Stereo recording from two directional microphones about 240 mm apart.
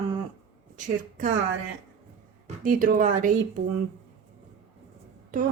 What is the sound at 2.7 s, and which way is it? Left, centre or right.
Speech, right.